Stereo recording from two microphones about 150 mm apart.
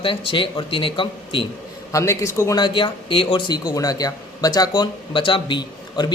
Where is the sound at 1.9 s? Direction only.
20° left (ahead or behind).